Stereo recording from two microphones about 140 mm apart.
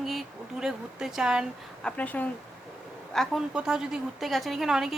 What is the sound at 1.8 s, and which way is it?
Speech, 10° left (ahead or behind).